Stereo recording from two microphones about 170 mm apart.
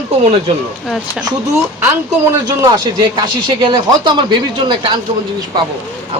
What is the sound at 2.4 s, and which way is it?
Speech, 25° right (ahead or behind).